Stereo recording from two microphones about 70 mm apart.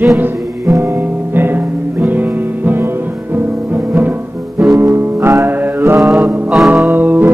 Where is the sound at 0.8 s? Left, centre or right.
Right.